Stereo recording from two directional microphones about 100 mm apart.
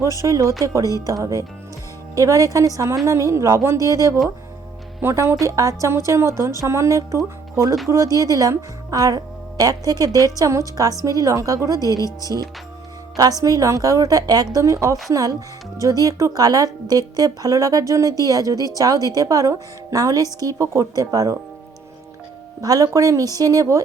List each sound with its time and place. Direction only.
0.0 s speech: 35° right (ahead or behind)
4.9 s a woman's voice: 25° right (ahead or behind)
22.6 s speech: 35° right (ahead or behind)